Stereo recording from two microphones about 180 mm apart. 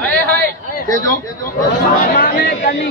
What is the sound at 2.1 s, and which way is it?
Speech, 55° left (ahead or behind).